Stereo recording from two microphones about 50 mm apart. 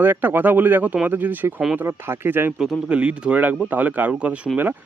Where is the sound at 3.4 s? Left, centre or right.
Right.